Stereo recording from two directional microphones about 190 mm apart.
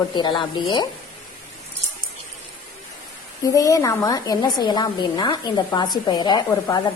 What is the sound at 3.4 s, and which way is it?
Speech, 20° left (ahead or behind).